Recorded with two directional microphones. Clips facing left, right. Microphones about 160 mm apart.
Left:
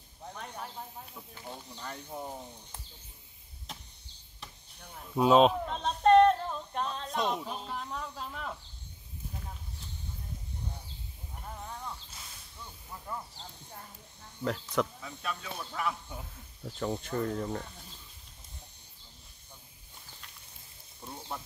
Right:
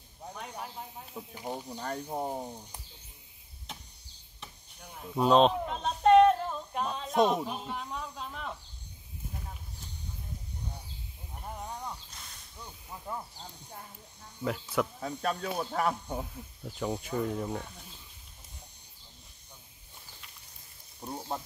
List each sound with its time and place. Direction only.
0.3 s snake: 10° right (ahead or behind)
1.8 s speech: 40° right (ahead or behind)
4.4 s a sound: 5° right (ahead or behind)
7.4 s speech: 5° right (ahead or behind)
11.4 s a sound: 15° right (ahead or behind)
12.1 s snake: 5° left (ahead or behind)
12.5 s snake: 15° right (ahead or behind)
14.4 s speech: 5° right (ahead or behind)
15.0 s speech: 45° right (ahead or behind)
16.6 s speech: 5° right (ahead or behind)
21.0 s speech: 35° right (ahead or behind)